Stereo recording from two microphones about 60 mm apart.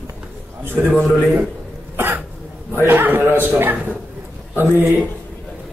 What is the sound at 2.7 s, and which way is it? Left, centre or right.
A man's voice, right.